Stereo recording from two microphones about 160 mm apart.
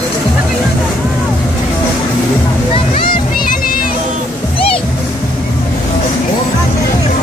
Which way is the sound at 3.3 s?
65° left (ahead or behind).